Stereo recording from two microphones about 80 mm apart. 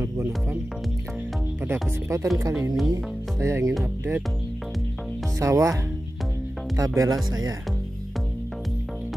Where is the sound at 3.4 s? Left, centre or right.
Right.